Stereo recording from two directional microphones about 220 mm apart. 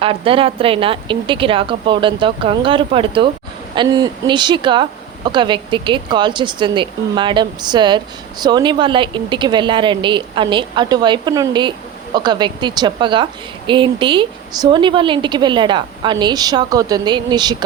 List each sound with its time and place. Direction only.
0.0 s speech: 25° right (ahead or behind)